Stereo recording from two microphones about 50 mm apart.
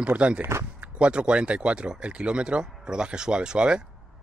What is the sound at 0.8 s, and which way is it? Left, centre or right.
Speech, right.